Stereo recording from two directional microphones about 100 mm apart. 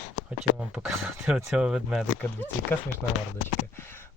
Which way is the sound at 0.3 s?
10° right (ahead or behind).